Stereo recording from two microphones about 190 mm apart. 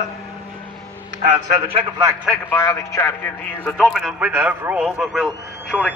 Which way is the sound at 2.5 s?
15° left (ahead or behind).